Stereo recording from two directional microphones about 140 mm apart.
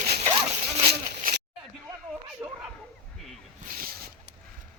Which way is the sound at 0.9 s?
90° right.